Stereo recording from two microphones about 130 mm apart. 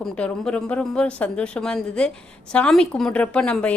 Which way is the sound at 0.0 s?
10° left (ahead or behind).